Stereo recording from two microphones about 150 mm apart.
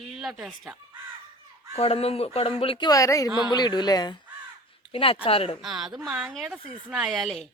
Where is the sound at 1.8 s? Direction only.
40° left (ahead or behind).